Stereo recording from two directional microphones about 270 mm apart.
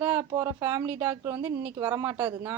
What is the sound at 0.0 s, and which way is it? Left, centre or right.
Speech, centre.